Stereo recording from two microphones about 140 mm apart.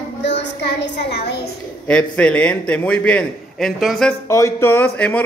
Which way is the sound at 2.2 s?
10° left (ahead or behind).